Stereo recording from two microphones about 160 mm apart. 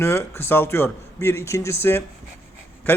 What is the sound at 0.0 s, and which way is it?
A man's voice, 15° left (ahead or behind).